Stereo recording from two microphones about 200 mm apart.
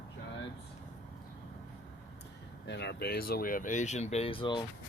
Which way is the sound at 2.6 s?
55° left (ahead or behind).